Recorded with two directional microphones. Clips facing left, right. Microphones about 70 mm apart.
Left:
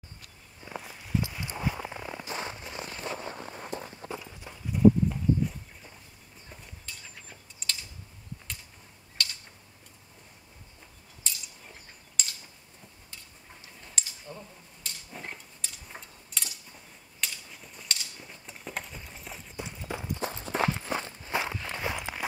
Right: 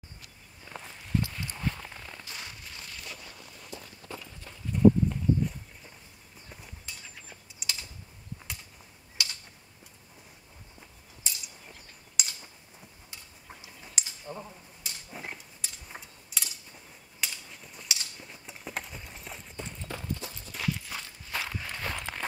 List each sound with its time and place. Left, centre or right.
0.6 s walk: centre
1.2 s a sound: centre; by 4.1 s left
4.1 s horse: centre
7.2 s mechanisms: centre
9.2 s tick-tock: centre
11.3 s mechanisms: centre
12.2 s a sound: centre
20.2 s walk: left; by 22.2 s centre